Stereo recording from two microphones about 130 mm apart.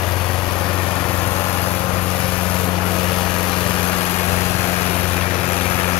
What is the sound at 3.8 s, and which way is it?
Vehicle, 20° left (ahead or behind).